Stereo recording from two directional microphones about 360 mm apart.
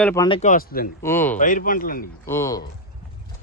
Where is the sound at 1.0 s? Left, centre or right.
Centre.